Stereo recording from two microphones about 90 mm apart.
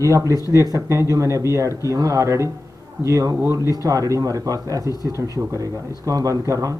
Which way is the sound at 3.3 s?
30° right (ahead or behind).